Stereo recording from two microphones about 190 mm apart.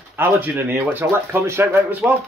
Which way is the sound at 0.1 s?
10° right (ahead or behind).